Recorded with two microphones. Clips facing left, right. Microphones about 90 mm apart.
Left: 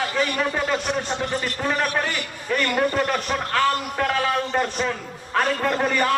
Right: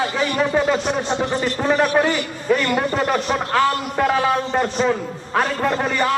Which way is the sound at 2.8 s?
15° right (ahead or behind).